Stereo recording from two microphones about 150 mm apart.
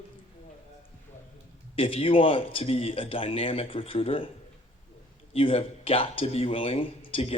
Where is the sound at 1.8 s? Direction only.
40° left (ahead or behind).